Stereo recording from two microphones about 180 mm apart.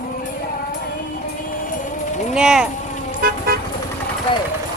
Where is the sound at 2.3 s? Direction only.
5° right (ahead or behind).